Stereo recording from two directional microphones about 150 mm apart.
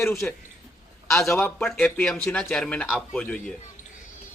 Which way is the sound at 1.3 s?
5° left (ahead or behind).